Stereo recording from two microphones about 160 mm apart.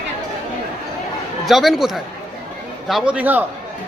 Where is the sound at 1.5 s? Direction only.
Centre (ahead or behind).